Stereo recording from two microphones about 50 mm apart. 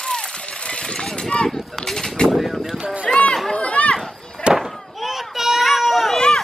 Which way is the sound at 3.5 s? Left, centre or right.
Left.